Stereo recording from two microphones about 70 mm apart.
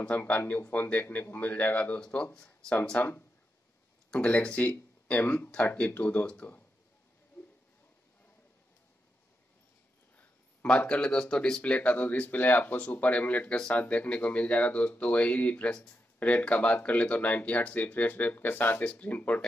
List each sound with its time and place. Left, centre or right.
0.0 s speech: left
3.0 s speech: left
4.1 s speech: centre
10.1 s speech: left
11.6 s speech: centre